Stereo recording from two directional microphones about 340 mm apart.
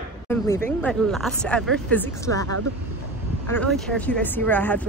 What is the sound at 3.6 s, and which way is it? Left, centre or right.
Speech, centre.